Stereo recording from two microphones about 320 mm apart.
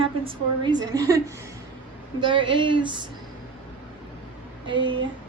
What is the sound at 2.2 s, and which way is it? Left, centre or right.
Speech, centre.